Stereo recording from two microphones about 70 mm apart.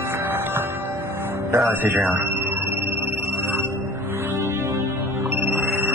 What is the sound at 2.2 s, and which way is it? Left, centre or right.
Music, right.